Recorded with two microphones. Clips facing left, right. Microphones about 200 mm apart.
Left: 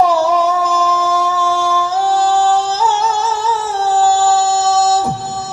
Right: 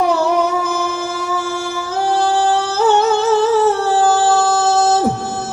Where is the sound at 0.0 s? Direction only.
60° right (ahead or behind).